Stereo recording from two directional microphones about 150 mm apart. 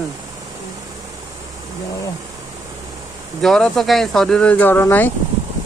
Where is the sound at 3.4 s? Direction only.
5° left (ahead or behind).